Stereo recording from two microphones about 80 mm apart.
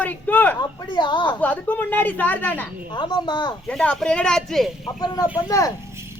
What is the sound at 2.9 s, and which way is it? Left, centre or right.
Speech, left.